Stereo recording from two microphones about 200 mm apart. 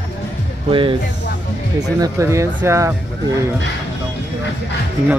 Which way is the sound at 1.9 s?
15° right (ahead or behind).